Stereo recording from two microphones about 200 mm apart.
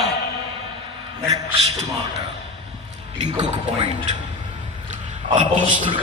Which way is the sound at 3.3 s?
25° right (ahead or behind).